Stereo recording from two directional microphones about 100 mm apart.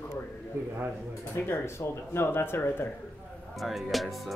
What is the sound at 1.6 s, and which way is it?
Speech, 25° left (ahead or behind).